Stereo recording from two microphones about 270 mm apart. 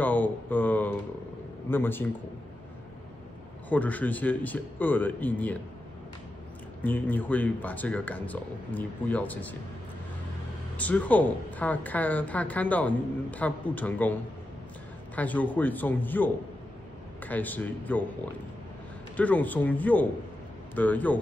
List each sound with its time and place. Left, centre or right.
0.0 s a man's voice: centre
3.6 s a man's voice: centre
6.8 s a woman's voice: centre
10.8 s a woman's voice: centre
15.1 s a man's voice: centre
19.1 s a man's voice: centre